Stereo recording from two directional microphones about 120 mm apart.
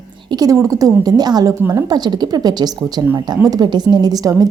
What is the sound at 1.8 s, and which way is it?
A woman's voice, 35° right (ahead or behind).